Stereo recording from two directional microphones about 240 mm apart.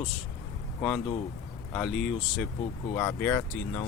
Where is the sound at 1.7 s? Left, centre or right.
Centre.